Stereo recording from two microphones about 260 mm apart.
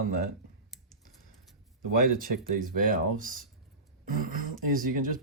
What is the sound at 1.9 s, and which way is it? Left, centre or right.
Speech, right.